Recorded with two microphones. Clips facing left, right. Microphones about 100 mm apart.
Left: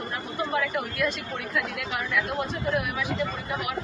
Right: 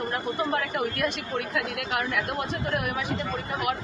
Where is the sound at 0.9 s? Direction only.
55° right (ahead or behind).